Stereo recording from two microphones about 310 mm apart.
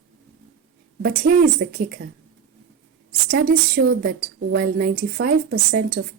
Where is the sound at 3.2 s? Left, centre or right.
Right.